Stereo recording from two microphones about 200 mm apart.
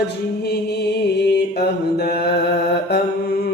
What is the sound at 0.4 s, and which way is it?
Mantra, 55° left (ahead or behind).